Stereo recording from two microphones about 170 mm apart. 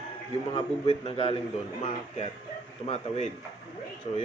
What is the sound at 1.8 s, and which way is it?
A man's voice, 45° left (ahead or behind).